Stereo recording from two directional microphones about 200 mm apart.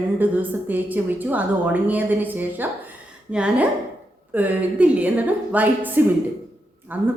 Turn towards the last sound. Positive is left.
turn(degrees=-10)  # may be behind; listen again after turning